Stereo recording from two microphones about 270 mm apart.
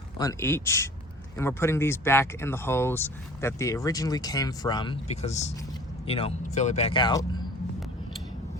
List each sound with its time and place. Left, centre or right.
0.2 s speech: centre